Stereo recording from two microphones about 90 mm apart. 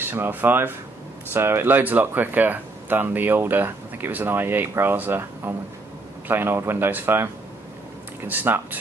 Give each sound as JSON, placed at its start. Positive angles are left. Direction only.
{"t": 0.0, "sound": "speech", "side_deg": -25}
{"t": 8.3, "sound": "speech", "side_deg": -20}